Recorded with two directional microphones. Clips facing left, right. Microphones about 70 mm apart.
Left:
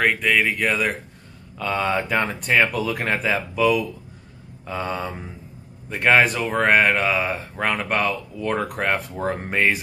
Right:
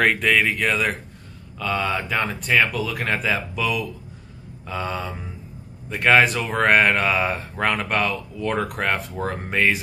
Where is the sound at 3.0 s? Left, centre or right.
Centre.